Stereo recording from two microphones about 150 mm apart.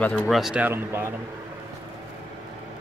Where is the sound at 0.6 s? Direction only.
15° right (ahead or behind).